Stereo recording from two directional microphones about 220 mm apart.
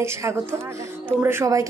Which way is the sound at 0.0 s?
10° right (ahead or behind).